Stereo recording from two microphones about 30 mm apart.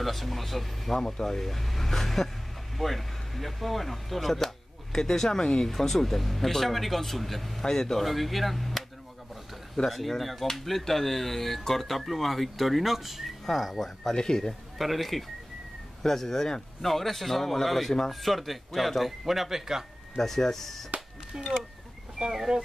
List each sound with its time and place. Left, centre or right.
0.0 s speech: centre
0.9 s speech: centre
7.6 s speech: centre
8.0 s speech: centre
9.8 s speech: centre
13.5 s speech: centre
14.1 s speech: left
14.8 s speech: centre
16.0 s speech: centre
20.2 s speech: centre
22.2 s speech: right